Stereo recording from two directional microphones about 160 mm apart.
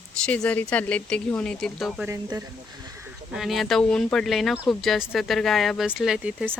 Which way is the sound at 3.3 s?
Centre (ahead or behind).